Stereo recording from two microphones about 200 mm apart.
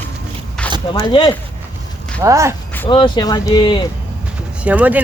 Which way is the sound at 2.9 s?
20° left (ahead or behind).